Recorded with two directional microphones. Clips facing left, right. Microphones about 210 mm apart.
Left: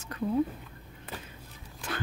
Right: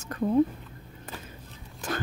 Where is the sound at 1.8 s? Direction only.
45° right (ahead or behind).